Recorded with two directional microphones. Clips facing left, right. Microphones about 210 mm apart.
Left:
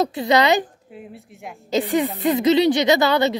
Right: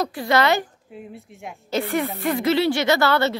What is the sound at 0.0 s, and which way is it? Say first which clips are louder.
Speech: left 3 dB; 20° left (ahead or behind).